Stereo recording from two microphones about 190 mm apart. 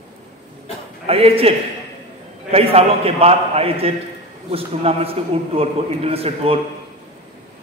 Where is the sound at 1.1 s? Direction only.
30° right (ahead or behind).